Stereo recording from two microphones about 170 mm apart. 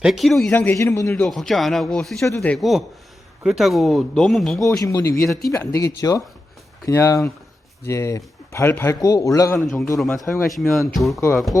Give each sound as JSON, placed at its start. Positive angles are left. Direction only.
{"t": 0.0, "sound": "a man's voice", "side_deg": 0}
{"t": 1.2, "sound": "speech", "side_deg": 0}
{"t": 4.8, "sound": "a man's voice", "side_deg": 20}
{"t": 9.6, "sound": "speech", "side_deg": 0}